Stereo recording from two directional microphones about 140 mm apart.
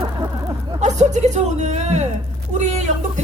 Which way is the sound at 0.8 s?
55° right (ahead or behind).